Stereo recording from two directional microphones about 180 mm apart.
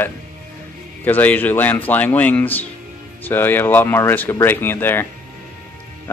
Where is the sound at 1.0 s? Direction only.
10° left (ahead or behind).